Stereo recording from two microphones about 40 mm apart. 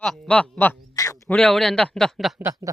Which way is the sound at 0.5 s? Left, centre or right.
Left.